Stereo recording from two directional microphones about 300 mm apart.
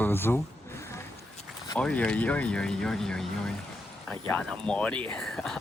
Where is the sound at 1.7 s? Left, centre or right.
Centre.